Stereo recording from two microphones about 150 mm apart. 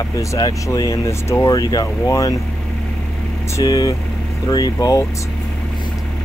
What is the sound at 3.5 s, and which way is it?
Speech, 25° left (ahead or behind).